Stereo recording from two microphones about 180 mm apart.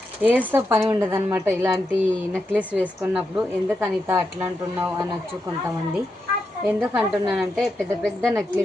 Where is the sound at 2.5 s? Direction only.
5° right (ahead or behind).